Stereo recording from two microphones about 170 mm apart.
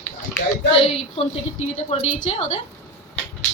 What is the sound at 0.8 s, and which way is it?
A woman's voice, 35° left (ahead or behind).